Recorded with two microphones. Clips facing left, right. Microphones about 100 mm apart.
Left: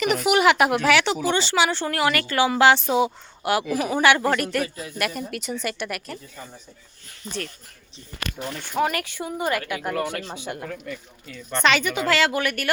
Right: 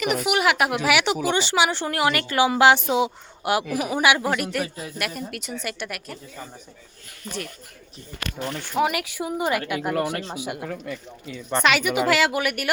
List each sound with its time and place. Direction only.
0.0 s speech: 5° right (ahead or behind)
0.8 s a woman's voice: 15° right (ahead or behind)
8.7 s a woman's voice: 5° right (ahead or behind)